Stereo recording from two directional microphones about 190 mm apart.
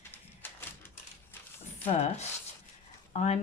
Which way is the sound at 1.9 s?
35° left (ahead or behind).